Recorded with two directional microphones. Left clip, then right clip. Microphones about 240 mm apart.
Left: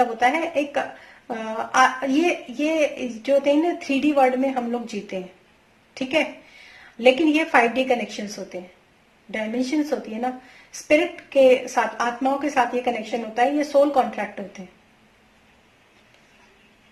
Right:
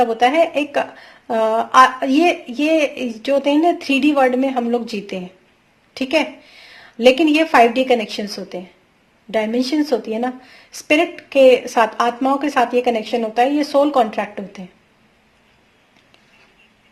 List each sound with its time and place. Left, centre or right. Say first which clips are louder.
0.0 s a woman's voice: right 6 dB; right
9.3 s a woman's voice: right 6 dB; right